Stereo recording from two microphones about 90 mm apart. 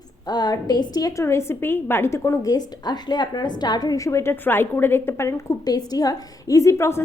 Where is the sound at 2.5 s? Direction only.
50° left (ahead or behind); by 5.4 s 30° left (ahead or behind).